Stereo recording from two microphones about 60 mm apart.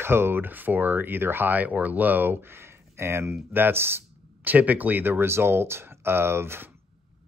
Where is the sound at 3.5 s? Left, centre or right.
Right.